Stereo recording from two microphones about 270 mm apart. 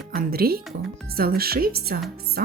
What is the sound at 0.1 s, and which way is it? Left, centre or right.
Speech, right.